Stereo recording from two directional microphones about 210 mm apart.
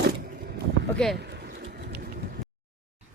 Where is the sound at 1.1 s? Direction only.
50° right (ahead or behind).